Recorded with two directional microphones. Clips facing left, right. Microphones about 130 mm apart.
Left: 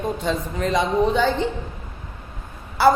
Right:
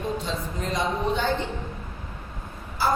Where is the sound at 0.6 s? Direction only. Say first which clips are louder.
Left 7 dB; 90° left.